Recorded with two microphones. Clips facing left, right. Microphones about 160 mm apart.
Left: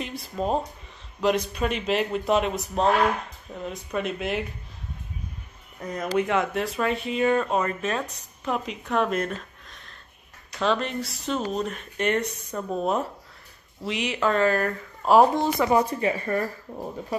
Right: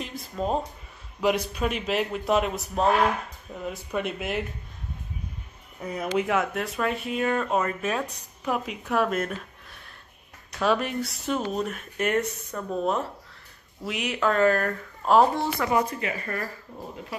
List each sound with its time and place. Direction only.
0.3 s speech: 5° left (ahead or behind)
5.8 s speech: 10° right (ahead or behind); by 15.7 s 15° left (ahead or behind)
15.7 s speech: 30° left (ahead or behind)